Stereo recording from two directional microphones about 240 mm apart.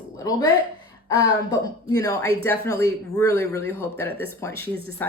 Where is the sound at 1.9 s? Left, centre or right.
Centre.